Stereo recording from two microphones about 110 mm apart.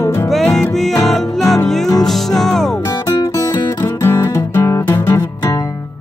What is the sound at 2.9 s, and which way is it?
Music, 30° left (ahead or behind).